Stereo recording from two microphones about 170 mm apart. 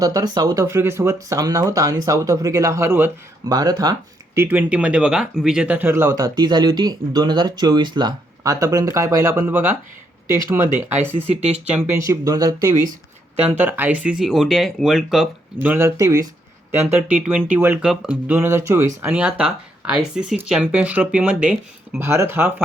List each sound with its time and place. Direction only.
0.0 s speech: 20° right (ahead or behind)
4.4 s speech: 10° right (ahead or behind)
11.1 s speech: 40° right (ahead or behind)
11.7 s speech: 15° right (ahead or behind)
12.8 s speech: 45° right (ahead or behind)
13.6 s speech: 10° right (ahead or behind)
15.7 s speech: 15° right (ahead or behind)